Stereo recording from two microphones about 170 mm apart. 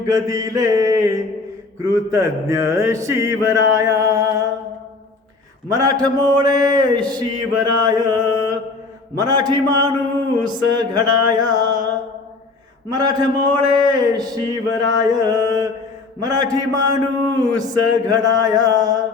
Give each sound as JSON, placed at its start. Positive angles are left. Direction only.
{"t": 0.0, "sound": "mantra", "side_deg": -20}
{"t": 1.8, "sound": "a sound", "side_deg": -20}
{"t": 5.6, "sound": "mantra", "side_deg": -20}